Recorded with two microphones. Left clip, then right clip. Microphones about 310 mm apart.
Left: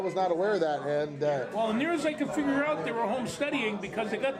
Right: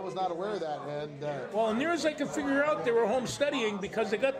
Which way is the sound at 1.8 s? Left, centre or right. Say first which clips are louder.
Even; right.